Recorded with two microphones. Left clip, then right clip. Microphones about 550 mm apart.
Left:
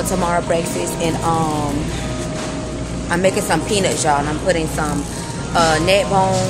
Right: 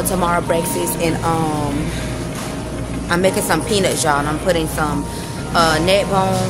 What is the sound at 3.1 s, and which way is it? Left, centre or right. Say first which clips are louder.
A woman's voice: even; right.